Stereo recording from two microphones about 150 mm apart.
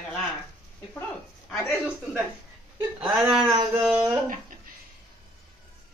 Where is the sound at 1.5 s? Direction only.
5° right (ahead or behind).